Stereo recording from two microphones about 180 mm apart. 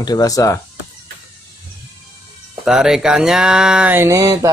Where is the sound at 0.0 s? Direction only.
20° left (ahead or behind).